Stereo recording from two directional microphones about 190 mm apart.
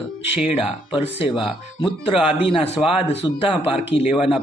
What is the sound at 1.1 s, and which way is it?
Speech, 25° left (ahead or behind).